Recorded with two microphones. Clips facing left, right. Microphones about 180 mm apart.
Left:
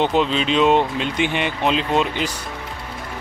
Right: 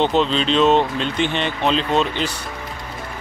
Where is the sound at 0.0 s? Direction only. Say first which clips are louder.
Right 1 dB; 10° left (ahead or behind).